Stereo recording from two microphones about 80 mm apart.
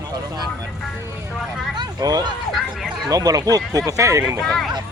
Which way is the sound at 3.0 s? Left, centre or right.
Right.